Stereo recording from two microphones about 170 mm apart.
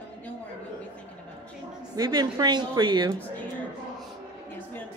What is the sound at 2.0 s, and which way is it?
A woman's voice, 25° right (ahead or behind).